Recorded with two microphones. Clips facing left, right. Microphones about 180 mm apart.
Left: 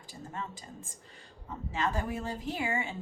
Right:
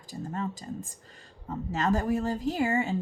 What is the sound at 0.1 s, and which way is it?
Speech, 40° right (ahead or behind).